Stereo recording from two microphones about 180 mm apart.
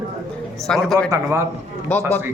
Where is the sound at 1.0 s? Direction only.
20° right (ahead or behind).